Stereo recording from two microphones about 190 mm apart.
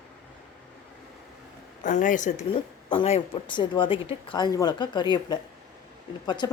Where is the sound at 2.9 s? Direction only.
30° left (ahead or behind).